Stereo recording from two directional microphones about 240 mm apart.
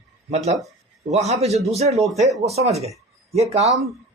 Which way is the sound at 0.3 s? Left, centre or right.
Right.